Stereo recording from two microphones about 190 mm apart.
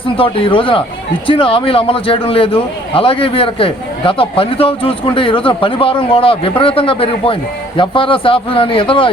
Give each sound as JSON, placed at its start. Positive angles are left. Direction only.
{"t": 0.0, "sound": "a man's voice", "side_deg": 30}